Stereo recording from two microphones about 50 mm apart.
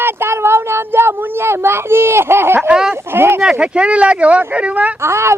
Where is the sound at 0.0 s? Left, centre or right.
Right.